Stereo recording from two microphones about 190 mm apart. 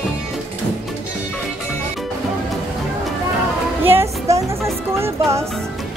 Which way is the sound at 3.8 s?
15° right (ahead or behind).